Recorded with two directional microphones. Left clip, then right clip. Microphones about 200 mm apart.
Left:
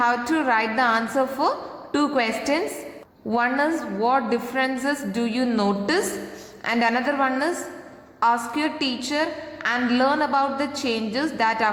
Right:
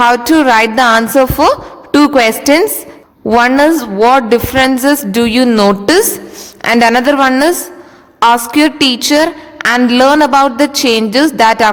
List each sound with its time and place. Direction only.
0.0 s a woman's voice: 50° right (ahead or behind)